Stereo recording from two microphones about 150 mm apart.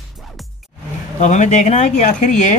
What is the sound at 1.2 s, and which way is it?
Speech, 50° left (ahead or behind).